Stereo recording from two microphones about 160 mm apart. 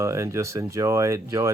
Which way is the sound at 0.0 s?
20° right (ahead or behind).